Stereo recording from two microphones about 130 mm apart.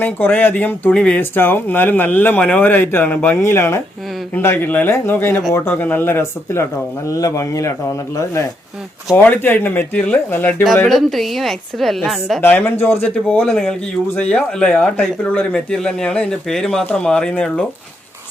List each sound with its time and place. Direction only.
0.0 s speech: 15° left (ahead or behind)
9.1 s speech: 15° left (ahead or behind)
10.8 s a woman's voice: centre (ahead or behind)
12.4 s speech: 15° left (ahead or behind)